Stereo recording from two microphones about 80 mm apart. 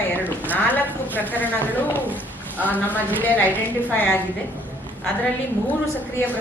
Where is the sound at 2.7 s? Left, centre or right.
Left.